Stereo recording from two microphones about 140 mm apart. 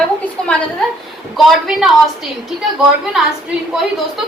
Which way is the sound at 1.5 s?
Centre (ahead or behind).